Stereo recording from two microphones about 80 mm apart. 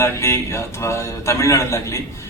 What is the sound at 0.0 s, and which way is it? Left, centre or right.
Speech, left.